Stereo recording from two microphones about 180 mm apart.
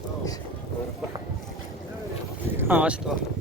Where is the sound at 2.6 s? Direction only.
10° right (ahead or behind).